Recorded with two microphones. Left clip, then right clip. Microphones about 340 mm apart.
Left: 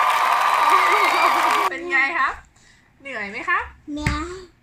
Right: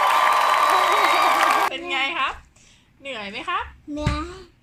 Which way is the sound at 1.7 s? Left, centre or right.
Centre.